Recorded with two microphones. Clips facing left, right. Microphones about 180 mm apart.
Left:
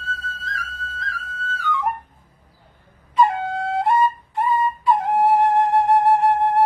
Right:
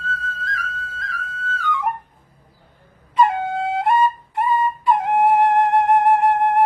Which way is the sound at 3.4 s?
20° right (ahead or behind).